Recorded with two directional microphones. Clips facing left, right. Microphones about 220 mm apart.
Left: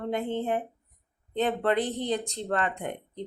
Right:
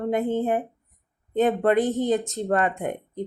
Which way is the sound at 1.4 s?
45° right (ahead or behind).